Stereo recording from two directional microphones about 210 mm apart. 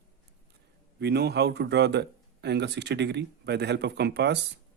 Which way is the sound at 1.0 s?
50° right (ahead or behind).